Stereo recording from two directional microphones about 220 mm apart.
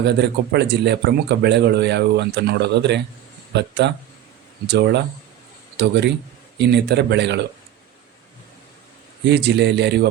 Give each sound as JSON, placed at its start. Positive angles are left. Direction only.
{"t": 0.0, "sound": "speech", "side_deg": -50}
{"t": 9.3, "sound": "speech", "side_deg": -50}